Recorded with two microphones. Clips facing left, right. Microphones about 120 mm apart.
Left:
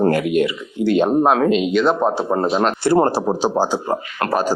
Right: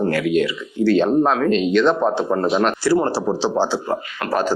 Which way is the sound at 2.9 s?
50° left (ahead or behind).